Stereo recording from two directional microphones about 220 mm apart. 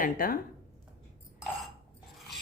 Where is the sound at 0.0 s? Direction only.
40° left (ahead or behind).